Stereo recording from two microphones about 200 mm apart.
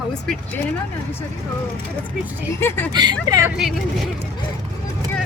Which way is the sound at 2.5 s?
10° left (ahead or behind).